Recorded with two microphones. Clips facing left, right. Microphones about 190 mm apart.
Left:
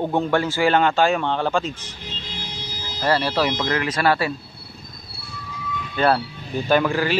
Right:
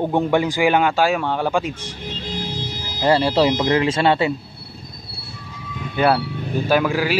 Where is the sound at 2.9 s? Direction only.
25° right (ahead or behind).